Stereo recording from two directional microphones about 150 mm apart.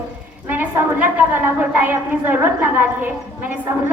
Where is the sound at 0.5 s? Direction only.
10° right (ahead or behind).